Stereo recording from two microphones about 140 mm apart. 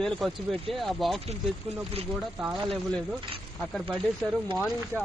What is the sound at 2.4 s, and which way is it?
Speech, centre (ahead or behind).